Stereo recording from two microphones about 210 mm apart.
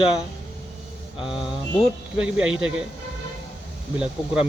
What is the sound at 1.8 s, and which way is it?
Speech, 5° right (ahead or behind).